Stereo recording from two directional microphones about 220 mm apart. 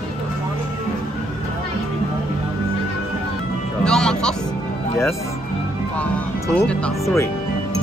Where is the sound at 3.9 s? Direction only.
5° left (ahead or behind).